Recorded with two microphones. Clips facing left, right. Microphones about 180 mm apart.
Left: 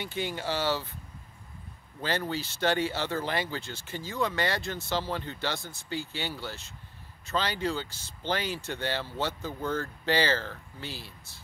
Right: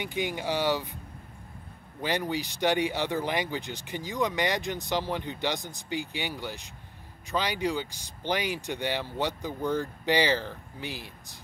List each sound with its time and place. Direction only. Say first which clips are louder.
0.0 s speech: right 2 dB; 15° right (ahead or behind)
2.0 s speech: right 2 dB; 15° right (ahead or behind)